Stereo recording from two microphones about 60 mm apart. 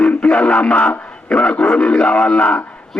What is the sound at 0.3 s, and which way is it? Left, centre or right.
A man's voice, centre.